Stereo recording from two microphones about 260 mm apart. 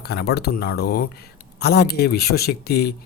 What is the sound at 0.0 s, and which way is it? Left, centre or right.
Speech, left.